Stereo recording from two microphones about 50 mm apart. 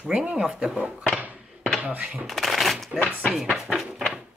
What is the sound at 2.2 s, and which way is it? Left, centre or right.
Speech, centre.